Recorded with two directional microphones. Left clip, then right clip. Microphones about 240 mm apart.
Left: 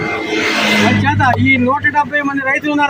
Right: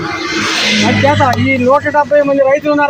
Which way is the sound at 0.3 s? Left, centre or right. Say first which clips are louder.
Right 1 dB; left.